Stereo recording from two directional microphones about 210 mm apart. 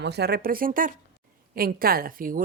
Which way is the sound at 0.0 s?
50° right (ahead or behind).